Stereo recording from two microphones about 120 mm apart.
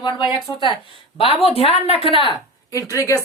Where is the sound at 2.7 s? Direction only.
25° left (ahead or behind).